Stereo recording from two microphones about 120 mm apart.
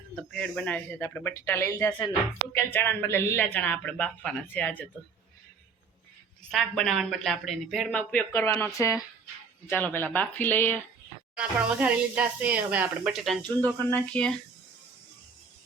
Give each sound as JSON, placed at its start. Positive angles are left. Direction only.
{"t": 0.2, "sound": "speech", "side_deg": 5}
{"t": 6.5, "sound": "speech", "side_deg": 0}
{"t": 11.3, "sound": "speech", "side_deg": -10}
{"t": 13.6, "sound": "speech", "side_deg": 10}